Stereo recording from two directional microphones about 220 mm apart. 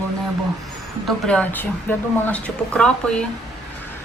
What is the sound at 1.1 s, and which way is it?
Speech, 5° left (ahead or behind).